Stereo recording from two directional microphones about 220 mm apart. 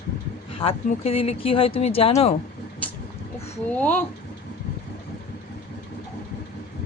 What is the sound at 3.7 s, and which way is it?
Speech, 5° left (ahead or behind).